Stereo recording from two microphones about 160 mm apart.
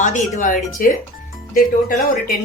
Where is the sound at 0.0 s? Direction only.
50° left (ahead or behind).